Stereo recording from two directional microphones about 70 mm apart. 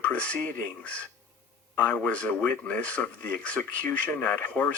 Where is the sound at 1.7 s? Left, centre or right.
Left.